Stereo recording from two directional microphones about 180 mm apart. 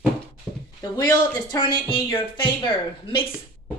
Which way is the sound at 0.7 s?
20° left (ahead or behind).